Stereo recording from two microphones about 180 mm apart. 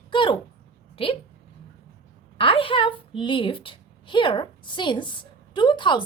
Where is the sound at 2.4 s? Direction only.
30° left (ahead or behind).